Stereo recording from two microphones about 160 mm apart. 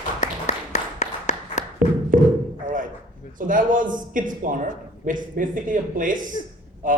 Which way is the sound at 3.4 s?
55° right (ahead or behind).